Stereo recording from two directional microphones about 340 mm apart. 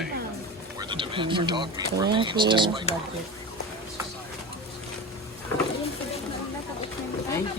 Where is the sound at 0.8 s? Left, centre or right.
Centre.